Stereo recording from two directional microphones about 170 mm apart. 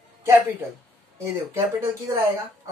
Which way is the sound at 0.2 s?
15° right (ahead or behind).